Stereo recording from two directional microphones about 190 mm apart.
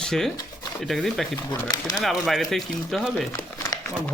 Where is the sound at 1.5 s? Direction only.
20° left (ahead or behind).